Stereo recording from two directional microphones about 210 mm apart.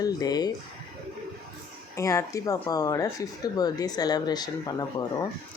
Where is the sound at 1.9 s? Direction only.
15° left (ahead or behind).